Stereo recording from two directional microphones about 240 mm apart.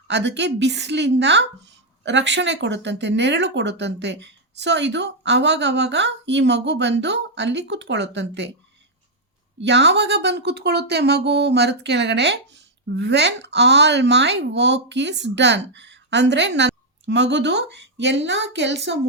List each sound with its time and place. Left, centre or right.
0.1 s speech: right
9.6 s speech: right